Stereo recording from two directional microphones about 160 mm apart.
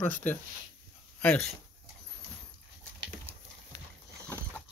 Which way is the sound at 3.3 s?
15° right (ahead or behind).